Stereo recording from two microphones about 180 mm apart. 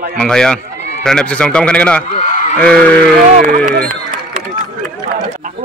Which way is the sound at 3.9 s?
45° right (ahead or behind).